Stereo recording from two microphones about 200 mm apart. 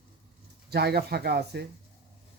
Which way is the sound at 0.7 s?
55° right (ahead or behind).